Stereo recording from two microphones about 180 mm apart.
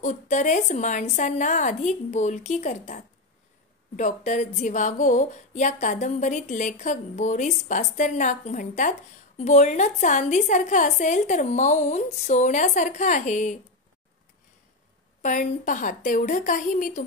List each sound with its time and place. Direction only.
0.0 s a woman's voice: 40° left (ahead or behind)
15.2 s speech: 45° left (ahead or behind)